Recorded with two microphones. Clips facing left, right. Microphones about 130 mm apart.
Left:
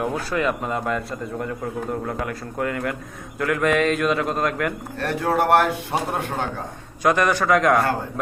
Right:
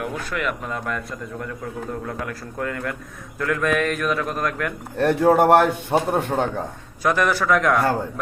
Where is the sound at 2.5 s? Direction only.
5° left (ahead or behind).